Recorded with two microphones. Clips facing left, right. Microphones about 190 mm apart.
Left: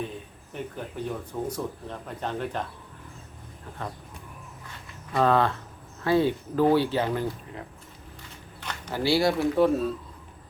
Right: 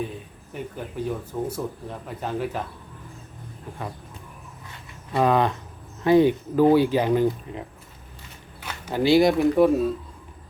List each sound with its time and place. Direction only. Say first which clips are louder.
1.0 s speech: right 3 dB; 5° right (ahead or behind)
5.1 s speech: right 2 dB; 15° right (ahead or behind)
8.9 s speech: right 6 dB; 20° right (ahead or behind)